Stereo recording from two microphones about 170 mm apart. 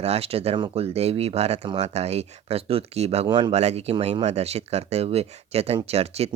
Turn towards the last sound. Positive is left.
turn(degrees=-35)  # may be behind; listen again after turning